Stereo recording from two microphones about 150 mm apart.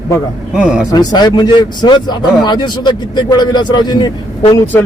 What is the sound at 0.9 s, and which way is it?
Speech, 30° left (ahead or behind).